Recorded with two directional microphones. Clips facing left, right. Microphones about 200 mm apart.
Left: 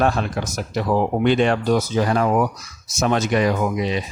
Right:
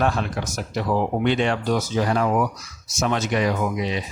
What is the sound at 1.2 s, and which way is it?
Speech, 50° left (ahead or behind).